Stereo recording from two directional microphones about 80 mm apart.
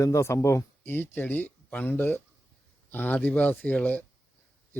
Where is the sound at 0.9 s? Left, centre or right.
Left.